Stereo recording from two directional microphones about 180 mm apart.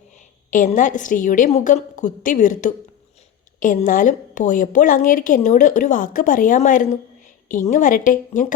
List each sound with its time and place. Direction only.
0.5 s a woman's voice: 45° left (ahead or behind)